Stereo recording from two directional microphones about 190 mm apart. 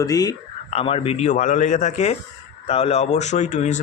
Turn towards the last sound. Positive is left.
turn(degrees=40)  # may be behind; listen again after turning